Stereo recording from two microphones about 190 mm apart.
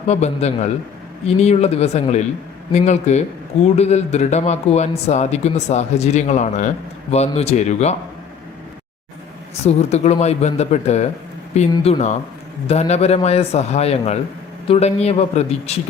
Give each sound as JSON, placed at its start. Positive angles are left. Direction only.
{"t": 0.1, "sound": "speech", "side_deg": 35}
{"t": 9.6, "sound": "speech", "side_deg": 35}